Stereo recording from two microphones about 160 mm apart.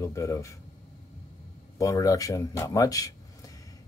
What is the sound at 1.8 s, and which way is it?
Speech, 20° left (ahead or behind).